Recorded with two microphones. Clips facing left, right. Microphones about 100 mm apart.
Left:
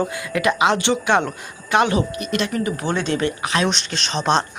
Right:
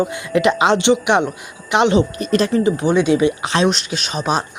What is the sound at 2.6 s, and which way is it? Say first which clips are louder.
Speech: right 7 dB; 15° right (ahead or behind).